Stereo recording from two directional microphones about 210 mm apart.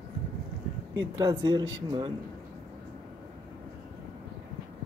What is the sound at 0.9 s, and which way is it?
Speech, 20° right (ahead or behind).